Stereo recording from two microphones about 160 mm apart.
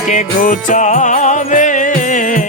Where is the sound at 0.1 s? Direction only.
55° left (ahead or behind).